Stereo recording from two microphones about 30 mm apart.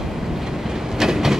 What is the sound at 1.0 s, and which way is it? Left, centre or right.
Train, centre.